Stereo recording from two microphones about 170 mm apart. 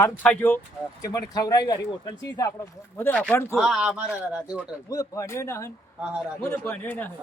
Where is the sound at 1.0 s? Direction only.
20° left (ahead or behind).